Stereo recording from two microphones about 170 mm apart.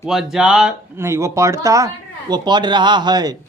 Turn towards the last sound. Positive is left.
turn(degrees=-25)  # may be behind; listen again after turning